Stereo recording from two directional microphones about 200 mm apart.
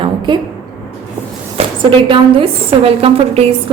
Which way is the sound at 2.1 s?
25° right (ahead or behind).